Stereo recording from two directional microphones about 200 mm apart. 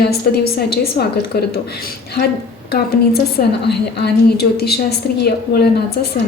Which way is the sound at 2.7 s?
50° left (ahead or behind).